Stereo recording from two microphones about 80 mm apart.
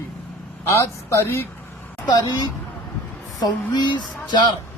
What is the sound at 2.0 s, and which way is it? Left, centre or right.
Speech, left.